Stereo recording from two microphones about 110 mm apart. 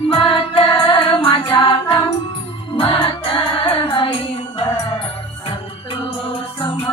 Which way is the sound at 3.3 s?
55° left (ahead or behind).